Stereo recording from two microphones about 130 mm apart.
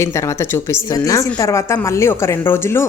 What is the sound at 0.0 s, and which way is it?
Speech, 20° left (ahead or behind).